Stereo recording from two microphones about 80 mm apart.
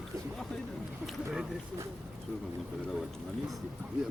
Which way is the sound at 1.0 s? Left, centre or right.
Centre.